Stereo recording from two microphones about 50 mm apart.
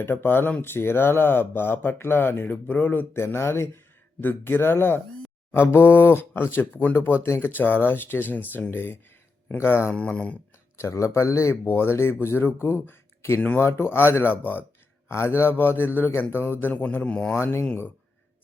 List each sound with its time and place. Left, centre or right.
0.0 s speech: left
3.1 s speech: left
4.2 s speech: left
7.3 s speech: left
7.5 s speech: left
10.8 s speech: left
11.6 s speech: left
15.1 s speech: left
17.0 s speech: centre
17.3 s speech: left